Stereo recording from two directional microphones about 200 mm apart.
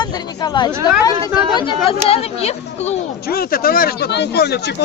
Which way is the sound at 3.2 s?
50° left (ahead or behind).